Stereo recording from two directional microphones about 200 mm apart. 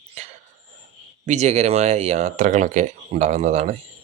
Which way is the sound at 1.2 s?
35° right (ahead or behind).